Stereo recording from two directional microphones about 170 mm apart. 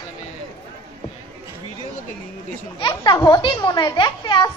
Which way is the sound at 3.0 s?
25° left (ahead or behind).